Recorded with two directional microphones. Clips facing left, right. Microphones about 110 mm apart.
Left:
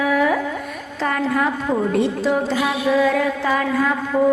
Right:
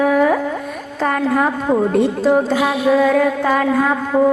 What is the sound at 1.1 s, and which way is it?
A woman's voice, 45° right (ahead or behind).